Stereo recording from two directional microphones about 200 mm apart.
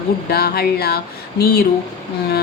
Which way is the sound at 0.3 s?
50° left (ahead or behind).